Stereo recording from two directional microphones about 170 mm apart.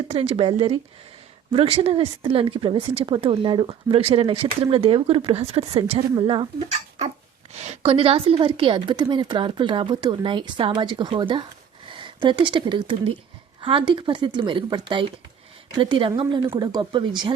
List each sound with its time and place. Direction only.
0.1 s a woman's voice: 35° right (ahead or behind)